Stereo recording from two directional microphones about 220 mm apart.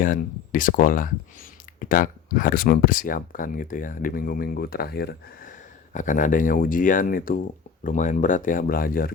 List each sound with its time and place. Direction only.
0.0 s speech: 40° left (ahead or behind)